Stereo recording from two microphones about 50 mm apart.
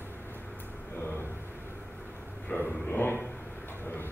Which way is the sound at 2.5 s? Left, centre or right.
Left.